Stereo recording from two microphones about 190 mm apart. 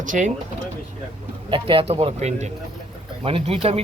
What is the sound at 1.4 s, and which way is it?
Speech, 25° right (ahead or behind).